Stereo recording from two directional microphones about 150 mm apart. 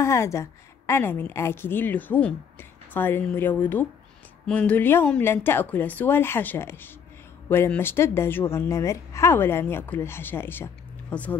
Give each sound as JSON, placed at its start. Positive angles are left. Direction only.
{"t": 0.0, "sound": "speech", "side_deg": 20}